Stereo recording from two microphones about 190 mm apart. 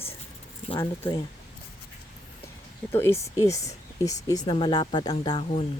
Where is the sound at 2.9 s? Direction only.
15° left (ahead or behind).